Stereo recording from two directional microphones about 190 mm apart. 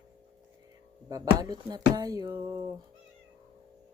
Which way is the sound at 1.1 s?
20° right (ahead or behind).